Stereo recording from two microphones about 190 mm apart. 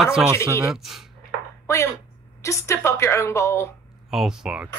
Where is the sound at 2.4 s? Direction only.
15° left (ahead or behind).